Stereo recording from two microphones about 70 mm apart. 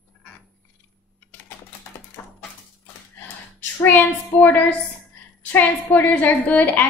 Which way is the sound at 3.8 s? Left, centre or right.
Left.